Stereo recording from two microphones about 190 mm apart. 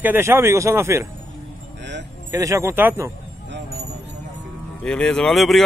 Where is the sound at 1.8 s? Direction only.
65° right (ahead or behind).